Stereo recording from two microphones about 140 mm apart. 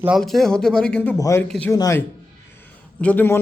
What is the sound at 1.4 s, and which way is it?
Speech, 10° left (ahead or behind).